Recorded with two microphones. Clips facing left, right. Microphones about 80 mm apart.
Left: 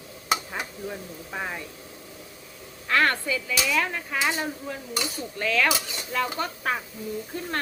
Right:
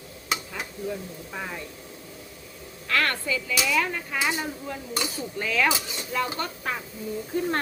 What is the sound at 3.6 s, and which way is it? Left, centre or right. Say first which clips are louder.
Speech: right 1 dB; centre.